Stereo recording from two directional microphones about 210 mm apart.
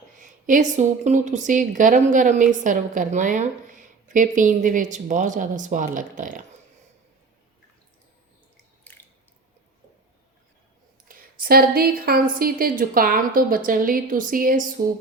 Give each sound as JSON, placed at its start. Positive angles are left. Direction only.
{"t": 0.2, "sound": "a woman's voice", "side_deg": -40}
{"t": 8.8, "sound": "drip", "side_deg": 10}
{"t": 11.1, "sound": "a woman's voice", "side_deg": -45}